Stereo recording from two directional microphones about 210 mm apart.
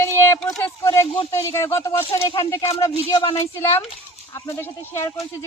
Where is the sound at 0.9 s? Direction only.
25° left (ahead or behind).